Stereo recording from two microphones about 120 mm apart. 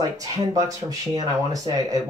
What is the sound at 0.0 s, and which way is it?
Speech, 30° right (ahead or behind).